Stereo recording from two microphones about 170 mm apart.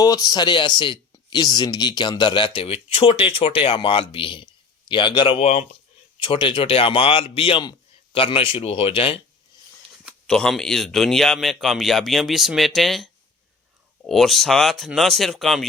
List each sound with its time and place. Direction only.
0.0 s a man's voice: 20° left (ahead or behind)
5.4 s a man's voice: 40° left (ahead or behind)
6.1 s a man's voice: 30° left (ahead or behind)
10.2 s speech: 5° left (ahead or behind)
14.1 s speech: centre (ahead or behind)